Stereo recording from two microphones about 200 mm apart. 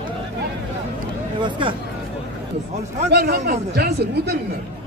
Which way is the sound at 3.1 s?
55° right (ahead or behind).